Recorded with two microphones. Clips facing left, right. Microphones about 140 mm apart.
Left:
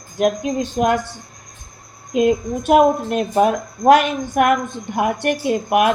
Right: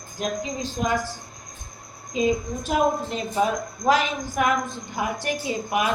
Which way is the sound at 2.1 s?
65° left (ahead or behind).